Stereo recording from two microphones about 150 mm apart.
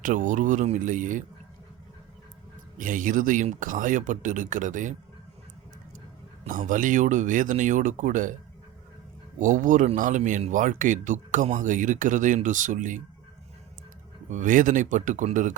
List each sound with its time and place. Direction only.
0.0 s speech: 60° right (ahead or behind)
2.7 s speech: 60° right (ahead or behind)
6.4 s speech: 60° right (ahead or behind)
9.4 s speech: 60° right (ahead or behind)
14.3 s speech: 60° right (ahead or behind)